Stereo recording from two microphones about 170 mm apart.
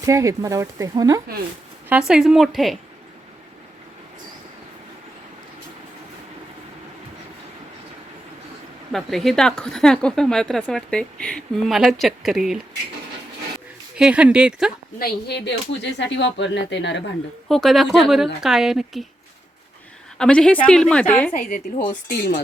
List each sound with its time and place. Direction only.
0.0 s speech: 20° right (ahead or behind)
1.9 s a woman's voice: 5° right (ahead or behind)
8.9 s a woman's voice: centre (ahead or behind)
14.0 s speech: 5° right (ahead or behind)
14.9 s speech: 70° left (ahead or behind); by 17.0 s 90° left
17.5 s a woman's voice: centre (ahead or behind)
20.1 s a woman's voice: 5° left (ahead or behind)
21.3 s a woman's voice: 55° left (ahead or behind)